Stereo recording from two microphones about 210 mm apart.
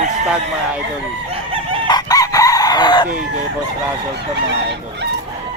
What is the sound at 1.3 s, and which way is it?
Chicken, 25° right (ahead or behind).